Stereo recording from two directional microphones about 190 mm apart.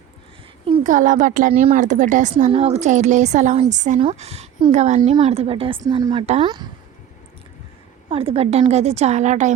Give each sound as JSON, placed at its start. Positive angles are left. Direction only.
{"t": 0.9, "sound": "a woman's voice", "side_deg": -40}
{"t": 6.2, "sound": "a woman's voice", "side_deg": -35}
{"t": 8.1, "sound": "a woman's voice", "side_deg": -30}